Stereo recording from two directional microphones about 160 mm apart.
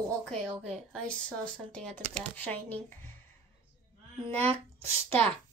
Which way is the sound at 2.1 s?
10° left (ahead or behind).